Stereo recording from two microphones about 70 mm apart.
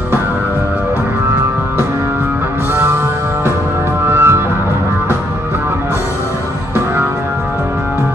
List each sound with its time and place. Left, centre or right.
4.1 s music: right